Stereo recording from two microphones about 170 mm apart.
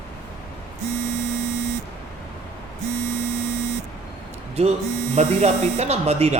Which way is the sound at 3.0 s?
40° right (ahead or behind).